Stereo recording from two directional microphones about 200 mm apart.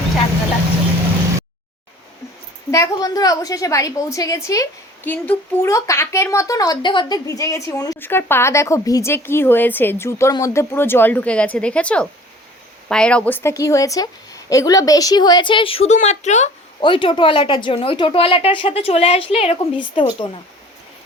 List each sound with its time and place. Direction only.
2.6 s a woman's voice: 15° left (ahead or behind); by 16.5 s 35° left (ahead or behind)
16.8 s speech: 25° left (ahead or behind)